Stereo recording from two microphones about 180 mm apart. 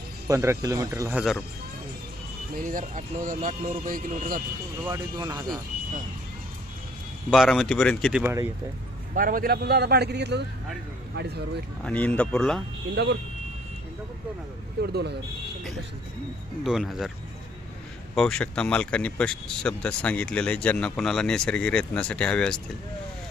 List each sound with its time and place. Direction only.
0.3 s speech: 15° right (ahead or behind)
1.1 s speech: centre (ahead or behind)
2.6 s speech: 45° right (ahead or behind)
4.8 s speech: 20° right (ahead or behind)
7.3 s speech: centre (ahead or behind)
8.2 s speech: 15° right (ahead or behind)
9.1 s a man's voice: 50° right (ahead or behind)
11.8 s speech: 10° left (ahead or behind)
12.9 s speech: 70° right (ahead or behind)
14.8 s speech: 65° right (ahead or behind)
16.6 s speech: centre (ahead or behind)
18.1 s speech: 5° left (ahead or behind)